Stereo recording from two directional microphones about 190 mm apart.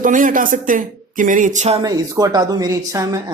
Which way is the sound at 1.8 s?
20° right (ahead or behind).